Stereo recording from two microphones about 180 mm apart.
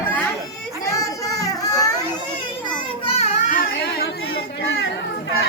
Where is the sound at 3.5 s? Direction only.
50° left (ahead or behind).